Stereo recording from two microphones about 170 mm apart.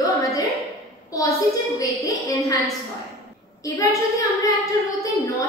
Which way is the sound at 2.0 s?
20° left (ahead or behind).